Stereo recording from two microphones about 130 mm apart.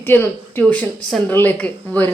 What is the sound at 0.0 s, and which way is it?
Speech, 15° left (ahead or behind).